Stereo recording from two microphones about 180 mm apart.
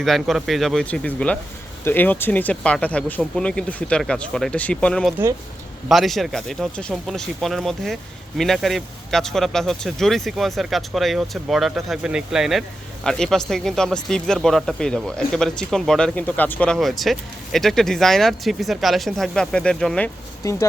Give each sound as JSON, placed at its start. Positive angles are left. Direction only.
{"t": 0.0, "sound": "speech", "side_deg": 0}
{"t": 20.4, "sound": "speech", "side_deg": 15}